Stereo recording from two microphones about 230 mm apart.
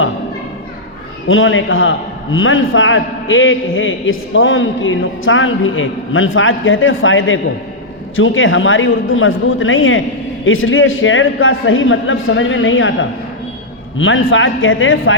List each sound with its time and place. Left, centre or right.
1.3 s a man's voice: left